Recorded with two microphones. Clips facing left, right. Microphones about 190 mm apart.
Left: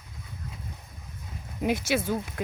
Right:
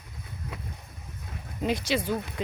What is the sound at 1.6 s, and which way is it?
Speech, 10° left (ahead or behind).